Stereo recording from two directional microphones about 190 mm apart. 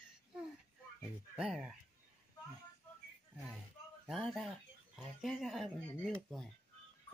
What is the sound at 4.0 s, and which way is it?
Speech, centre (ahead or behind).